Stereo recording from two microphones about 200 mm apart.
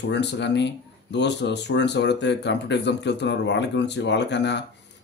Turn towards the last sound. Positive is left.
turn(degrees=60)  # may be behind; listen again after turning